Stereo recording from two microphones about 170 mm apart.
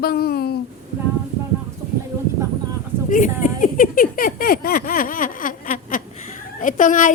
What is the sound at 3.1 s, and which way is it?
Speech, 50° left (ahead or behind).